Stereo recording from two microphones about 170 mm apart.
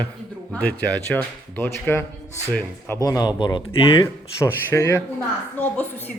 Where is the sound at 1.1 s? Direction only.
10° left (ahead or behind); by 4.0 s 25° left (ahead or behind).